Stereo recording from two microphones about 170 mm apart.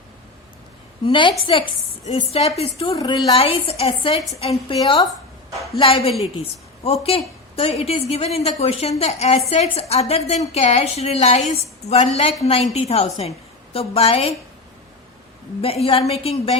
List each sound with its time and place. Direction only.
1.0 s a woman's voice: 30° left (ahead or behind)
3.0 s a woman's voice: 20° left (ahead or behind)
3.3 s a woman's voice: 35° left (ahead or behind)
15.6 s a woman's voice: 35° left (ahead or behind)